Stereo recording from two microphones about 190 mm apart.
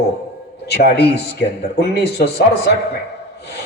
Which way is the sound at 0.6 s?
55° left (ahead or behind).